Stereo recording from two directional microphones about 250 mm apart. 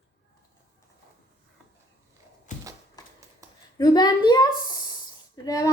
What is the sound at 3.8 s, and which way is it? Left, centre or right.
A woman's voice, centre.